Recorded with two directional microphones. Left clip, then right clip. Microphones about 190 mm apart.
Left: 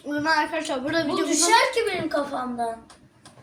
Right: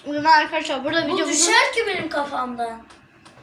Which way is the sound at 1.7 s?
25° left (ahead or behind).